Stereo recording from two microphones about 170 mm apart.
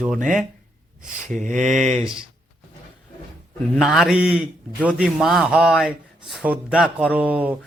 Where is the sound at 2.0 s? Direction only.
5° right (ahead or behind).